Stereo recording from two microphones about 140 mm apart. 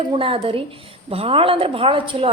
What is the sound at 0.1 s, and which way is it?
A woman's voice, 40° right (ahead or behind).